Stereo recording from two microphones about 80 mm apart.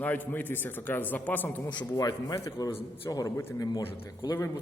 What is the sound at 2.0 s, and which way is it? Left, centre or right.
A man's voice, left.